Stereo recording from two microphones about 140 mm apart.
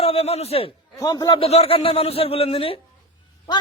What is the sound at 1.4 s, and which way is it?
A man's voice, 45° left (ahead or behind).